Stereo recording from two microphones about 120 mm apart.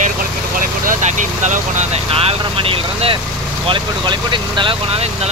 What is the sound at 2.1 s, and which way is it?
Speech, 50° right (ahead or behind).